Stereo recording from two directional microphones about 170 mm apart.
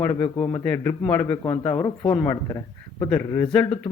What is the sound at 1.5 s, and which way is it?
Speech, 25° left (ahead or behind).